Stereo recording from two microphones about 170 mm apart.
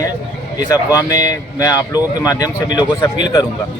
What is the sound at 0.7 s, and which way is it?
Speech, 20° left (ahead or behind).